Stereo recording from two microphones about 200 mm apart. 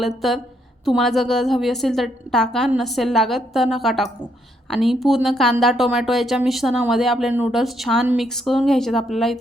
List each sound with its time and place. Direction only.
0.0 s a woman's voice: centre (ahead or behind)